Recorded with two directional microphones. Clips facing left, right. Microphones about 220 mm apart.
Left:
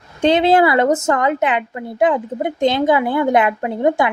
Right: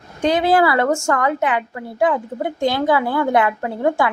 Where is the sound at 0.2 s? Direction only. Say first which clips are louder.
Left 3 dB; 25° left (ahead or behind).